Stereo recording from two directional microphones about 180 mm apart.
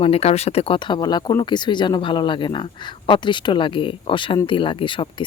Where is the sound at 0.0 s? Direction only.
35° left (ahead or behind).